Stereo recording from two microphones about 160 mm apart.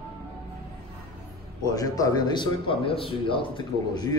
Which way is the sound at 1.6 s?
25° left (ahead or behind).